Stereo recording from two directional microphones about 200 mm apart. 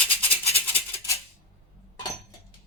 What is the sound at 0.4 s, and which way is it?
Maraca, 30° left (ahead or behind).